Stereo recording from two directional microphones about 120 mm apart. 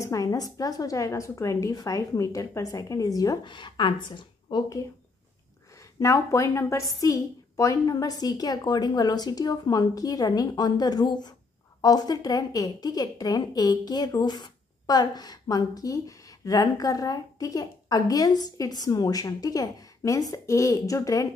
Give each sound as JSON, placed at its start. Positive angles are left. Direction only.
{"t": 0.0, "sound": "a woman's voice", "side_deg": 30}
{"t": 3.4, "sound": "a woman's voice", "side_deg": 40}
{"t": 5.8, "sound": "a woman's voice", "side_deg": 25}